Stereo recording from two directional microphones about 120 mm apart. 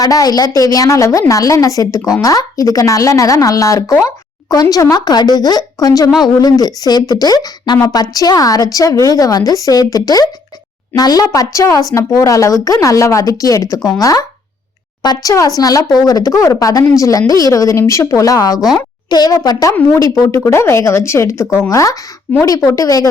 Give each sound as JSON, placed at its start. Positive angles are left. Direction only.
{"t": 0.0, "sound": "a woman's voice", "side_deg": 30}
{"t": 22.3, "sound": "a woman's voice", "side_deg": 15}
{"t": 22.6, "sound": "a woman's voice", "side_deg": 30}